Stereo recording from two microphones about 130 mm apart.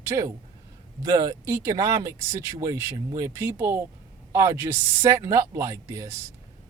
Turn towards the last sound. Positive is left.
turn(degrees=-25)  # may be behind; listen again after turning